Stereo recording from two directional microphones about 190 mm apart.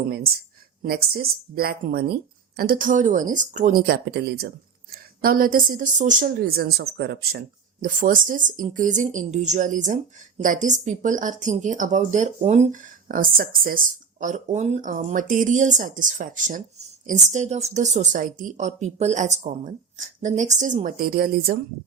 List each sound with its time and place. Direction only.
0.8 s a woman's voice: 55° right (ahead or behind)
14.2 s a woman's voice: 40° right (ahead or behind)